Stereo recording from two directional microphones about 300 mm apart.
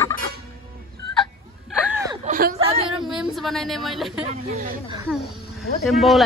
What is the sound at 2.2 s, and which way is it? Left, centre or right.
Hubbub, right.